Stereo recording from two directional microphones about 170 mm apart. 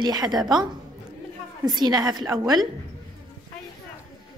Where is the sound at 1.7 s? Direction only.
25° right (ahead or behind).